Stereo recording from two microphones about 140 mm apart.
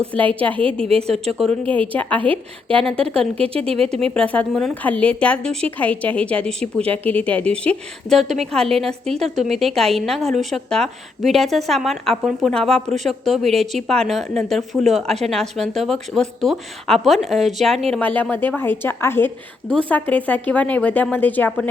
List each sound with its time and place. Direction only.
0.1 s a woman's voice: 10° left (ahead or behind)
0.9 s a woman's voice: 45° right (ahead or behind)
2.0 s a woman's voice: 10° left (ahead or behind)
2.2 s a woman's voice: 40° right (ahead or behind)
4.1 s a woman's voice: 10° left (ahead or behind)
17.9 s a woman's voice: 10° left (ahead or behind)